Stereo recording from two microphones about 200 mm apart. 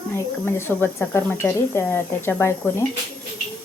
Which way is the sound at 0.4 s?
10° left (ahead or behind).